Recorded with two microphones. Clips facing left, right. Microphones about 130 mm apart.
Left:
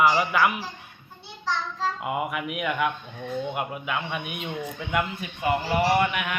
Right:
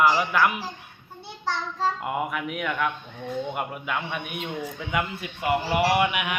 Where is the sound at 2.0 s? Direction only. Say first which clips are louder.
Even; 5° left (ahead or behind).